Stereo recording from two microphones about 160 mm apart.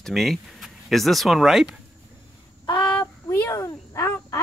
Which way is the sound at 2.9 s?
15° left (ahead or behind).